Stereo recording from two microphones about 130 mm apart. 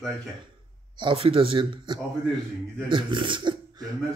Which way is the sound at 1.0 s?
40° right (ahead or behind).